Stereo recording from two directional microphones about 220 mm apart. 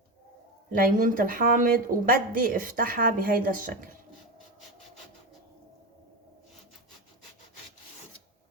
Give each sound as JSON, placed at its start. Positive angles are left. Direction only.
{"t": 0.7, "sound": "speech", "side_deg": -40}